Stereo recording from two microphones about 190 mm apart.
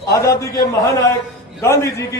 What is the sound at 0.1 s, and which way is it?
A man's voice, 15° left (ahead or behind).